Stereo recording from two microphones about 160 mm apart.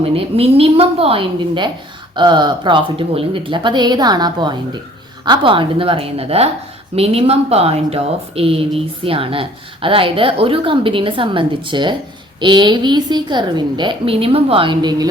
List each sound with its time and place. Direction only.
0.0 s a woman's voice: 35° right (ahead or behind)